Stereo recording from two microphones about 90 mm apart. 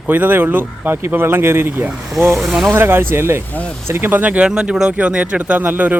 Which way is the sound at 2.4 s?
Centre (ahead or behind).